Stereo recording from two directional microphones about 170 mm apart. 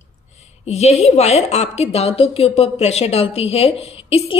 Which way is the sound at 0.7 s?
40° left (ahead or behind).